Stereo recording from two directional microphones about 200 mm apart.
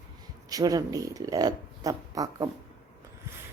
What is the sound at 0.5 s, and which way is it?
Speech, 20° right (ahead or behind).